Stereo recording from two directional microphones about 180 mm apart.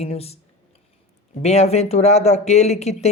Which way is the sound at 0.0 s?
35° left (ahead or behind).